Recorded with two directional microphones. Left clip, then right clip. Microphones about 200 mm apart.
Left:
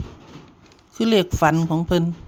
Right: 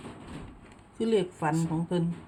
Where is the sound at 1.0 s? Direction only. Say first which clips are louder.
Left 10 dB; 45° left (ahead or behind).